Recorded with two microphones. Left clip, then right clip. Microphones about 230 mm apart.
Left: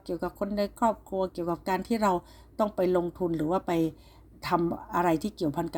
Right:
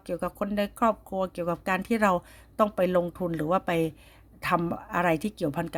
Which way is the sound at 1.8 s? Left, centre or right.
Right.